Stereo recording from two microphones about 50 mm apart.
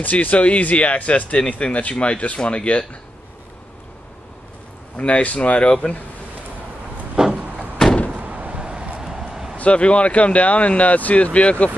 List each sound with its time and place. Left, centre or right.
0.0 s speech: left
4.9 s speech: left
7.3 s a sound: centre
9.6 s speech: left